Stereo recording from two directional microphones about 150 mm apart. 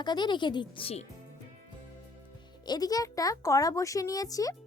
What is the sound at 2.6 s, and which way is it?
A child's voice, 25° left (ahead or behind).